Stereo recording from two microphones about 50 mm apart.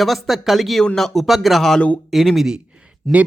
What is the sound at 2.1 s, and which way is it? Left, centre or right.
Speech, centre.